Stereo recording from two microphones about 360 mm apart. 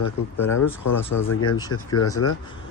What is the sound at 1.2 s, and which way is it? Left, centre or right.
Speech, left.